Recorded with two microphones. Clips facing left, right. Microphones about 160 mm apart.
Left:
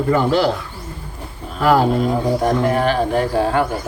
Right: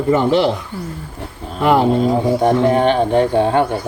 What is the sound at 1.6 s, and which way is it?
Speech, 25° right (ahead or behind).